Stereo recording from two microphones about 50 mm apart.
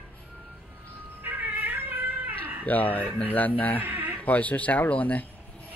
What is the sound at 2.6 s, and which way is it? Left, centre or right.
Speech, left.